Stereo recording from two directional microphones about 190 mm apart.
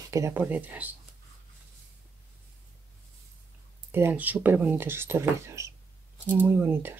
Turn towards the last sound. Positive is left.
turn(degrees=-10)  # may be behind; listen again after turning